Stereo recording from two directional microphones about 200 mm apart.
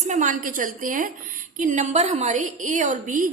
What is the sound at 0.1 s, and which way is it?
A woman's voice, 40° right (ahead or behind).